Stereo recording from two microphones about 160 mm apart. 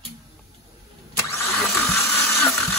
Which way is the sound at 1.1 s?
15° left (ahead or behind).